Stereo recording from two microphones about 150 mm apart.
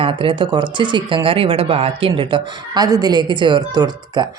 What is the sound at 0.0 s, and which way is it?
Speech, 35° right (ahead or behind).